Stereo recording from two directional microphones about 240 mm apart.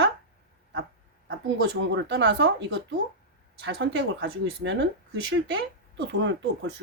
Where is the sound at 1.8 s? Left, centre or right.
Right.